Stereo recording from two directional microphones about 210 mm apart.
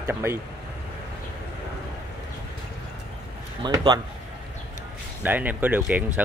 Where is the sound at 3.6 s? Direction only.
20° right (ahead or behind).